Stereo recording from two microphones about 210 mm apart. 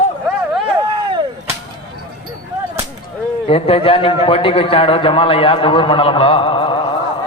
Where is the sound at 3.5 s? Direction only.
25° left (ahead or behind).